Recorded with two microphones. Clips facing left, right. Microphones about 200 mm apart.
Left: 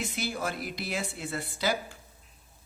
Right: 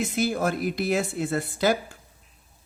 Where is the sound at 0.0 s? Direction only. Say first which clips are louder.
Right 8 dB; 45° right (ahead or behind).